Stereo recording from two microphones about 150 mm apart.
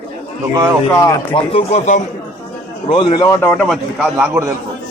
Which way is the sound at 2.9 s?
35° left (ahead or behind).